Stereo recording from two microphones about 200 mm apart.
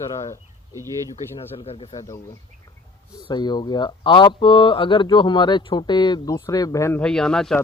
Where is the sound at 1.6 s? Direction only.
30° left (ahead or behind).